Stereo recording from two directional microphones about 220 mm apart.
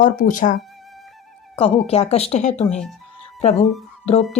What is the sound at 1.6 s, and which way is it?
Speech, 25° left (ahead or behind).